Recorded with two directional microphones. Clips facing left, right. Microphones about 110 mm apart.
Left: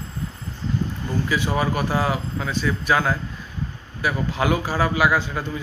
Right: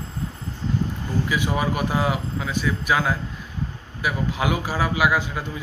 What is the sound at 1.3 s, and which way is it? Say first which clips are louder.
Speech: left 2 dB; 15° right (ahead or behind).